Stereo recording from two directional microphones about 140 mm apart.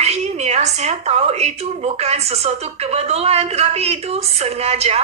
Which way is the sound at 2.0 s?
50° right (ahead or behind).